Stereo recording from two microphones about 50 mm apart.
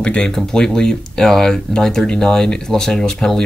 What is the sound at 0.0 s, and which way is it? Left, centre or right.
Speech, left.